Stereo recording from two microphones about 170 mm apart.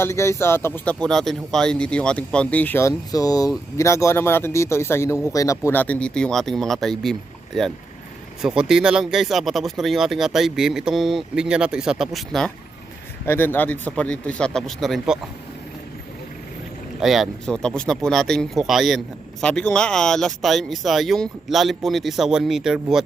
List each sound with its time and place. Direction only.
0.0 s speech: 15° left (ahead or behind)
13.2 s speech: 15° left (ahead or behind)
17.0 s speech: centre (ahead or behind)